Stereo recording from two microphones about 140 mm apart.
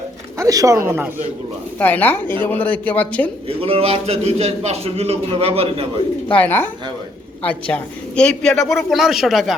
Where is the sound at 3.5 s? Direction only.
45° right (ahead or behind).